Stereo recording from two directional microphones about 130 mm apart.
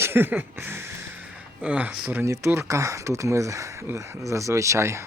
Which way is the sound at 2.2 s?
20° right (ahead or behind).